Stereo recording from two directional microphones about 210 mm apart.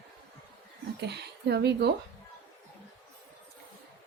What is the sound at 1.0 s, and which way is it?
Speech, 50° right (ahead or behind).